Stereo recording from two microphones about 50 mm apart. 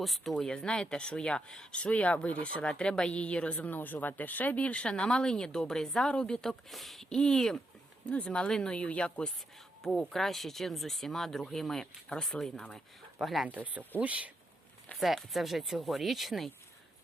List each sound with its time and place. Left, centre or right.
0.0 s speech: centre
0.3 s speech: centre
1.7 s speech: left
2.6 s speech: centre
3.8 s speech: left; by 6.6 s centre
6.7 s speech: centre
8.1 s speech: left
9.8 s speech: centre
13.5 s speech: right
14.9 s speech: centre